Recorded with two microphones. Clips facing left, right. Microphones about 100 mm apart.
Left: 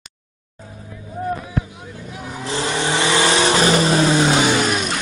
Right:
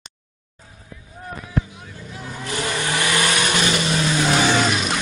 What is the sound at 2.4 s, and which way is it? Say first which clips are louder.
Vehicle: left 3 dB; 25° left (ahead or behind).